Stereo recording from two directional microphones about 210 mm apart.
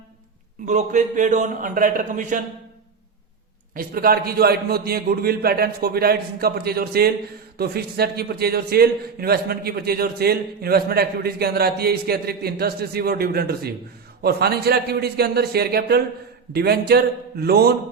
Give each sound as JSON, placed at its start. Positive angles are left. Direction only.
{"t": 0.6, "sound": "a man's voice", "side_deg": -35}
{"t": 3.8, "sound": "a man's voice", "side_deg": -45}